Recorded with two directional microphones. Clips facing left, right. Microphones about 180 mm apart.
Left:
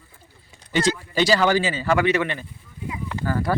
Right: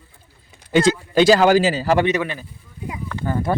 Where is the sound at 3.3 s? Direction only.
20° right (ahead or behind).